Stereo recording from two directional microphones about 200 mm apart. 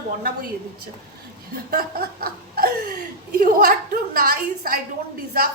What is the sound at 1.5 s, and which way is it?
Speech, 50° right (ahead or behind).